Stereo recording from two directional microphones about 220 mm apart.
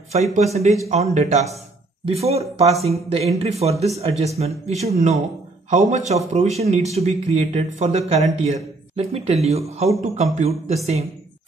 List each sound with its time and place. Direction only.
0.1 s speech: 30° right (ahead or behind)